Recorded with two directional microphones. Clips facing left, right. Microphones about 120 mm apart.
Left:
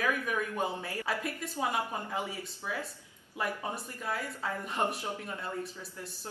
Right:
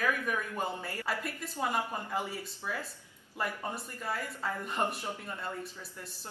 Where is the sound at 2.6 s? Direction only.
Centre (ahead or behind).